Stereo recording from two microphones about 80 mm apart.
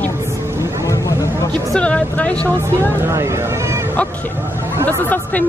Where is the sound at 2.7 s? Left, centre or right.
Right.